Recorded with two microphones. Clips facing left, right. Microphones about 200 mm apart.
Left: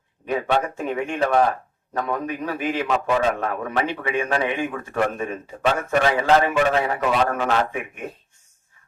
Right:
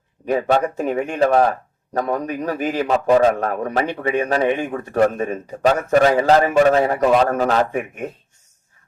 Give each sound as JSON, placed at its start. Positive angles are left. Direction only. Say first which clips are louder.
{"t": 0.3, "sound": "a man's voice", "louder": "right 4 dB", "side_deg": -40}